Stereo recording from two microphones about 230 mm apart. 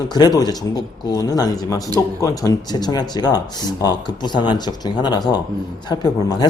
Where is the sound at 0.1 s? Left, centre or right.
Centre.